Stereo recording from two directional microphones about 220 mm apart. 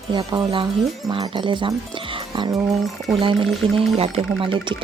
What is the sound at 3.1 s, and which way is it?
Speech, 25° right (ahead or behind).